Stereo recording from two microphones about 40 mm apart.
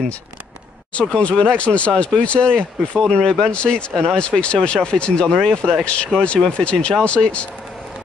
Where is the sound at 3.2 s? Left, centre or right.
Centre.